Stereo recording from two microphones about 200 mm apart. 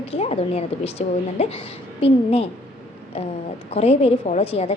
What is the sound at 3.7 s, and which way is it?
A woman's voice, 30° left (ahead or behind).